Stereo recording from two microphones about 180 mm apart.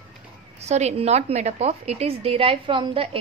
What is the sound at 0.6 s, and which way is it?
A woman's voice, 40° right (ahead or behind).